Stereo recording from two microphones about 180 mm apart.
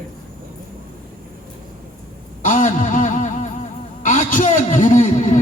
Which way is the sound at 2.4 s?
45° left (ahead or behind).